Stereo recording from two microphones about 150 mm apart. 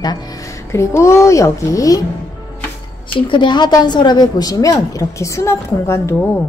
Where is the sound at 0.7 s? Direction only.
20° left (ahead or behind).